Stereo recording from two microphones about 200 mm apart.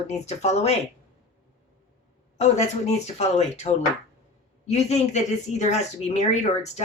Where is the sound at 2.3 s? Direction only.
35° left (ahead or behind).